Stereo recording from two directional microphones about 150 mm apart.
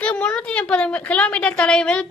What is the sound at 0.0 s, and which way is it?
A woman's voice, 5° left (ahead or behind).